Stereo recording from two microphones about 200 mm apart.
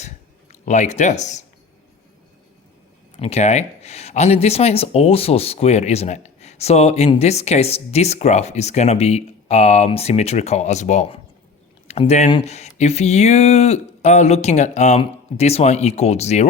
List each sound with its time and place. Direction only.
0.6 s speech: 35° left (ahead or behind)
3.2 s speech: 30° left (ahead or behind)